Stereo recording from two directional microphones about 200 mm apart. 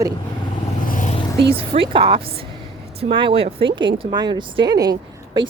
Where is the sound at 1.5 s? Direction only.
25° right (ahead or behind).